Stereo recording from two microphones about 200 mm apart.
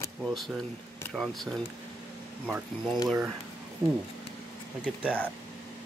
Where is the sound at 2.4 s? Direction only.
5° right (ahead or behind).